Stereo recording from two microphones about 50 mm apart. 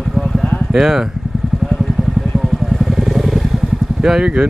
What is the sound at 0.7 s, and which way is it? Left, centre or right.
Speech, centre.